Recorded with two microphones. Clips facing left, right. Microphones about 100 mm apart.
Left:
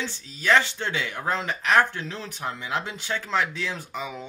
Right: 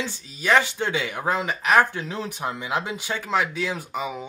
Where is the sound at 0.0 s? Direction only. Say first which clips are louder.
Right 1 dB; 10° right (ahead or behind).